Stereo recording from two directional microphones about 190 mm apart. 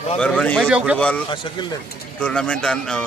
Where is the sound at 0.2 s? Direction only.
5° left (ahead or behind).